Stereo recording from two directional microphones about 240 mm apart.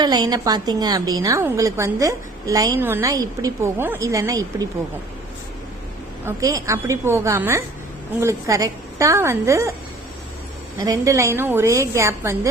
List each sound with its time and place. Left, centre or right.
0.0 s a woman's voice: centre
6.2 s a woman's voice: centre
10.8 s a woman's voice: centre